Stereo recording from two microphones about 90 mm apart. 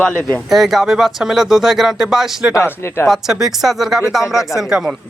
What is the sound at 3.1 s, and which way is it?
Speech, 5° right (ahead or behind).